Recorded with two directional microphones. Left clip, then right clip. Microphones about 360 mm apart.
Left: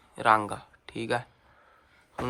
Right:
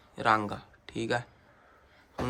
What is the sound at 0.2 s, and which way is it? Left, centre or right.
Speech, centre.